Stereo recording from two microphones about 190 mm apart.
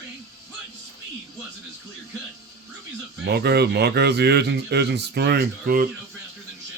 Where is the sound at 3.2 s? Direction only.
60° right (ahead or behind).